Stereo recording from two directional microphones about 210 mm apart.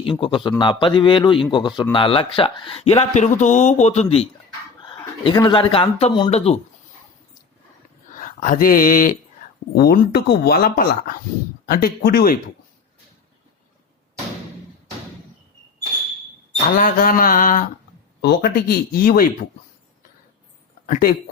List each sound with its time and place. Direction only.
0.0 s a man's voice: 25° left (ahead or behind)
8.1 s speech: 40° left (ahead or behind)
16.7 s a sound: 40° left (ahead or behind)
18.2 s speech: 50° left (ahead or behind)
20.8 s speech: 45° left (ahead or behind)